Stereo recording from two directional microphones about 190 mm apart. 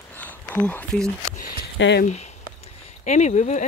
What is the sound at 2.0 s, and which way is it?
Speech, 35° left (ahead or behind).